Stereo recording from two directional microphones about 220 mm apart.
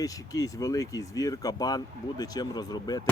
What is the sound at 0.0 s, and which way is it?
Speech, 15° left (ahead or behind).